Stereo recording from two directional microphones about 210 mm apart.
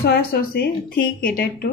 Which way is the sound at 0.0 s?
45° left (ahead or behind).